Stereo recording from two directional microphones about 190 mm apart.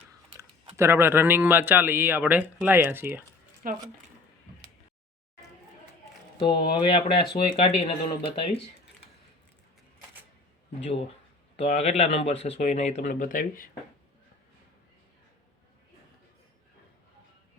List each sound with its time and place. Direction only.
0.8 s speech: 10° right (ahead or behind)
3.6 s speech: 45° right (ahead or behind)
6.4 s speech: 25° left (ahead or behind)
11.5 s speech: 35° left (ahead or behind)